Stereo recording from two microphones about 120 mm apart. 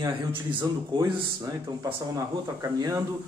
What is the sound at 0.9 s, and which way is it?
A man's voice, 35° right (ahead or behind).